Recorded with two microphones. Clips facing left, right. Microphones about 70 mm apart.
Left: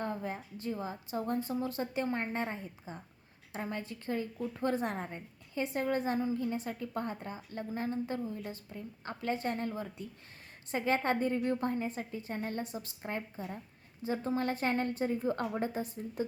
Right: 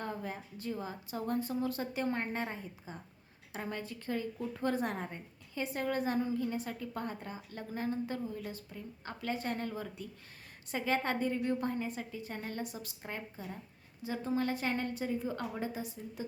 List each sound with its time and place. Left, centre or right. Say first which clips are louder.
0.6 s a woman's voice: left 1 dB; left